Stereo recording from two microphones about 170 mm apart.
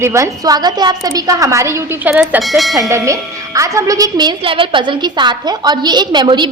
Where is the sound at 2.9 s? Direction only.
20° right (ahead or behind).